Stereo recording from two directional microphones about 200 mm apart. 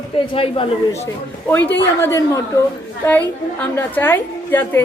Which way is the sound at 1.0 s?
10° left (ahead or behind).